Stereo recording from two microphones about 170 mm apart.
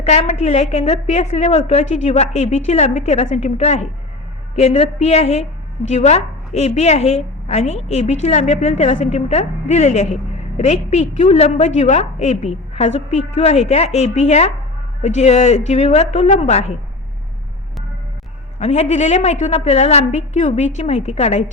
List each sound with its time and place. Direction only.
0.0 s a woman's voice: 40° left (ahead or behind)
18.6 s a woman's voice: 40° left (ahead or behind)